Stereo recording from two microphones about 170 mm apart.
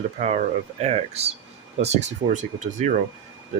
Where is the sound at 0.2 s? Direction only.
40° right (ahead or behind).